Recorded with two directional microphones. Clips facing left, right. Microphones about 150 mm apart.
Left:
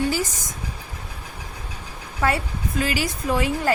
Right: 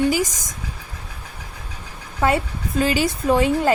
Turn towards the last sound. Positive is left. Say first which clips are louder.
# right 5 dB
turn(degrees=-25)  # may be behind; listen again after turning